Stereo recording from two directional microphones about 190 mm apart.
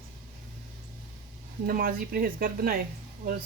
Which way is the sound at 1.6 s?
50° right (ahead or behind).